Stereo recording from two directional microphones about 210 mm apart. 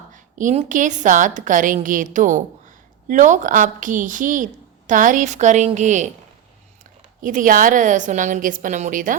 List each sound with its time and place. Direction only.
0.1 s a woman's voice: 35° right (ahead or behind)
7.2 s a woman's voice: 40° right (ahead or behind)